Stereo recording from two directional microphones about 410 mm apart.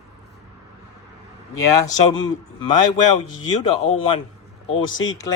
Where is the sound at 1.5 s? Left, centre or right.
Centre.